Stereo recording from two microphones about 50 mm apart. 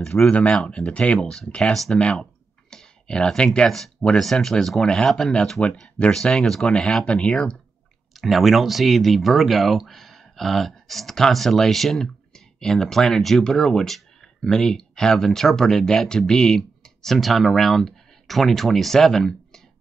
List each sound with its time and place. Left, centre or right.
0.0 s speech: centre
0.3 s speech: left
8.1 s speech: centre